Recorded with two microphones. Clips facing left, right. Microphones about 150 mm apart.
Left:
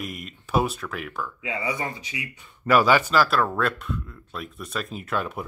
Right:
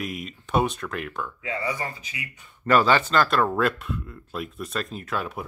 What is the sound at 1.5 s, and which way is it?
Speech, 20° left (ahead or behind).